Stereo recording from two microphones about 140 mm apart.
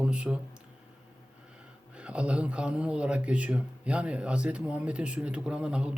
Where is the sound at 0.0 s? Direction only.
5° right (ahead or behind).